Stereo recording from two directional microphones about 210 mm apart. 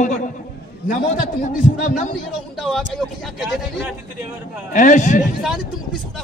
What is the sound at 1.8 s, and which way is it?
Speech, 35° left (ahead or behind).